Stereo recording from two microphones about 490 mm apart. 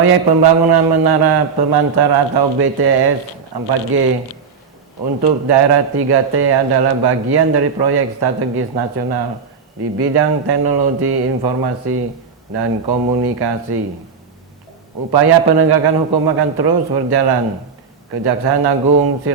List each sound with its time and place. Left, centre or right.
0.0 s a man's voice: right
5.5 s a man's voice: right
15.1 s a man's voice: right